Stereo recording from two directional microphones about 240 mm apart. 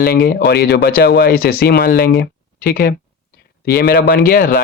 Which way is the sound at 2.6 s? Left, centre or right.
Left.